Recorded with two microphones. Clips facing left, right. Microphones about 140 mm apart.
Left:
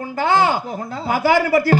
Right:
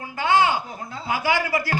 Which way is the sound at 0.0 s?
40° left (ahead or behind).